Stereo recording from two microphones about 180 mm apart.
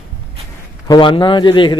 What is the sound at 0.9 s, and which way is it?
Speech, 25° left (ahead or behind).